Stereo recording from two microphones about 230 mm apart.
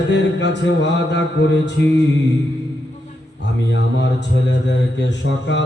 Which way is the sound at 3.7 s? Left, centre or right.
Left.